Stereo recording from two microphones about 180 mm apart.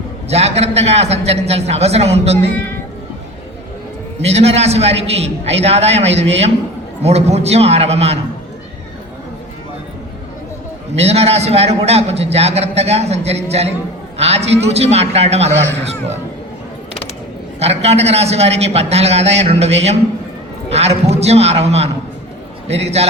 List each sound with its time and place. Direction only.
0.3 s a man's voice: 35° right (ahead or behind)
4.2 s a man's voice: 35° right (ahead or behind)
10.9 s a man's voice: 35° right (ahead or behind)
17.6 s a man's voice: 35° right (ahead or behind)